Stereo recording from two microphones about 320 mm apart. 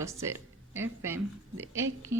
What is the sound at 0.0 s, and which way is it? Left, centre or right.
A woman's voice, centre.